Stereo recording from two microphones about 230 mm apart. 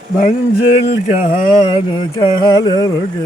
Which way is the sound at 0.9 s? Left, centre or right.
Left.